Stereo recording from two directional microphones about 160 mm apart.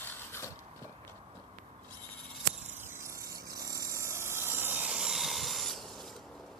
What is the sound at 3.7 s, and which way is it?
Vehicle, 20° right (ahead or behind).